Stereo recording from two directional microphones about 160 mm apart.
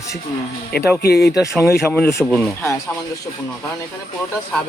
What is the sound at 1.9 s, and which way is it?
Speech, 5° left (ahead or behind).